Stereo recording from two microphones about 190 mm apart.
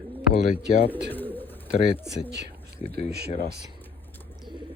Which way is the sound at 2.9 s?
60° right (ahead or behind).